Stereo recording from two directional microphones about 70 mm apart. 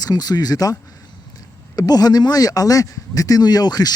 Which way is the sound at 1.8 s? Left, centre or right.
Left.